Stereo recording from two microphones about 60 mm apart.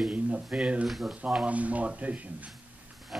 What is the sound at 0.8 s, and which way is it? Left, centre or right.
Speech, centre.